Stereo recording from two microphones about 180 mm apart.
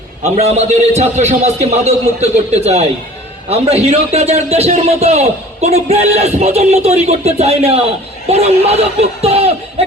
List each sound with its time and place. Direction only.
0.2 s speech: 35° right (ahead or behind)